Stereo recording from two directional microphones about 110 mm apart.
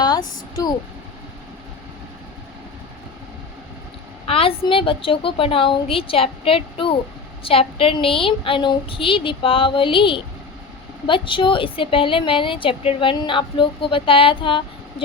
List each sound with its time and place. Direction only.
0.0 s a woman's voice: 40° left (ahead or behind)
4.3 s a woman's voice: 55° left (ahead or behind)